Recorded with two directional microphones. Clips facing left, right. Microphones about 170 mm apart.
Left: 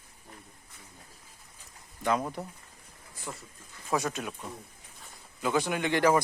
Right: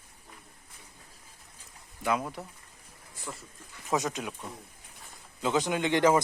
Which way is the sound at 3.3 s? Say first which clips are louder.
Left 1 dB; 15° left (ahead or behind).